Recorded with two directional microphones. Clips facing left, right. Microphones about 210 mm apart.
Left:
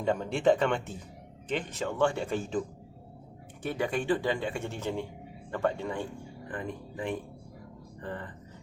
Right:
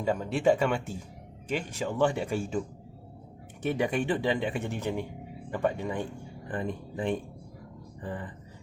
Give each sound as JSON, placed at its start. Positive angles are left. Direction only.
{"t": 0.0, "sound": "speech", "side_deg": -5}
{"t": 3.6, "sound": "speech", "side_deg": -20}
{"t": 6.5, "sound": "speech", "side_deg": -30}
{"t": 8.0, "sound": "speech", "side_deg": -15}